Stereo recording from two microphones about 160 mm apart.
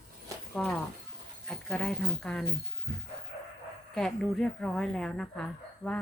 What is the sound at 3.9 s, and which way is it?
Speech, centre (ahead or behind).